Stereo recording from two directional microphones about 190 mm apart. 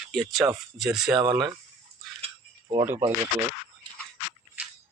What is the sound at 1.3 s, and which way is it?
Speech, 20° right (ahead or behind).